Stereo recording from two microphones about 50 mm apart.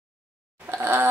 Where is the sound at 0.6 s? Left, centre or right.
Right.